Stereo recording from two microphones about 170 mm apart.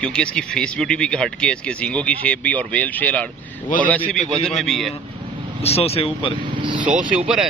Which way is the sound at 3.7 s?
55° left (ahead or behind).